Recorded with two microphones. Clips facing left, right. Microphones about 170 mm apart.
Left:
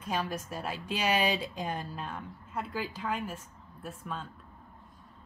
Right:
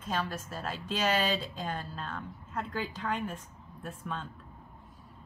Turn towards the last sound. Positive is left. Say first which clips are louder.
# right 1 dB
turn(degrees=5)  # may be behind; listen again after turning